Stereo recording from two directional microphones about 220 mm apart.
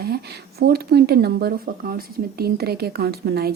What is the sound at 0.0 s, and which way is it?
Speech, 45° right (ahead or behind).